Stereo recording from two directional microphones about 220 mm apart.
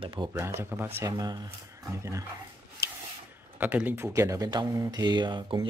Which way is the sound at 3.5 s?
5° right (ahead or behind).